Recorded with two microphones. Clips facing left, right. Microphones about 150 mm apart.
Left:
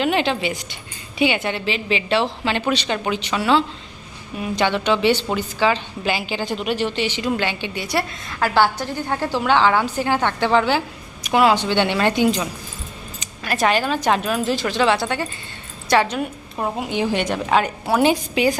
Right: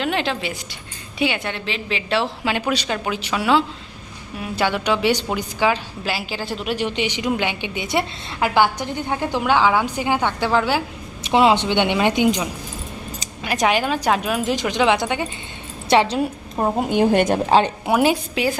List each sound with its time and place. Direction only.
0.0 s a woman's voice: centre (ahead or behind)
6.8 s a woman's voice: 15° right (ahead or behind)
11.2 s a woman's voice: 25° right (ahead or behind)
16.7 s a woman's voice: 50° right (ahead or behind)
17.4 s a woman's voice: 25° right (ahead or behind)
17.9 s a woman's voice: 5° right (ahead or behind)